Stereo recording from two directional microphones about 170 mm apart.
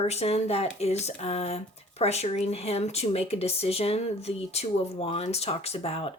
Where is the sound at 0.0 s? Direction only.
40° left (ahead or behind).